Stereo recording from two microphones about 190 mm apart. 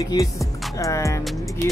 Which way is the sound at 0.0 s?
20° left (ahead or behind).